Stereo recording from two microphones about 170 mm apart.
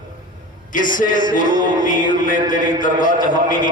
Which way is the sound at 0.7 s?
50° left (ahead or behind).